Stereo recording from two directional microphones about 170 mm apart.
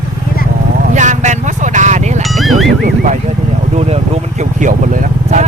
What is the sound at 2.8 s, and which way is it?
Vehicle, 60° right (ahead or behind).